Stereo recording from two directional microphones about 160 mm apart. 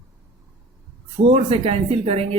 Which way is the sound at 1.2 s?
40° right (ahead or behind).